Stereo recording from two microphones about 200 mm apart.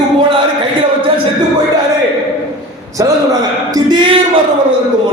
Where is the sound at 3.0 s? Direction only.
15° right (ahead or behind).